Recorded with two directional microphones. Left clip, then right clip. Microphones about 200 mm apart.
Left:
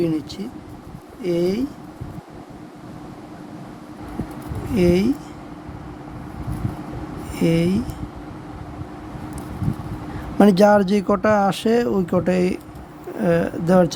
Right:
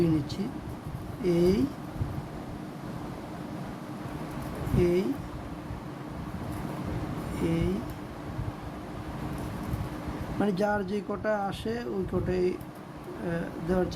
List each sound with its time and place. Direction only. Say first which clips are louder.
0.0 s a sound: left 5 dB; 55° left (ahead or behind)
1.2 s speech: left 4 dB; 55° left (ahead or behind)
4.8 s speech: left 8 dB; 60° left (ahead or behind)
7.3 s speech: left 11 dB; 55° left (ahead or behind)
10.4 s speech: left 15 dB; 60° left (ahead or behind)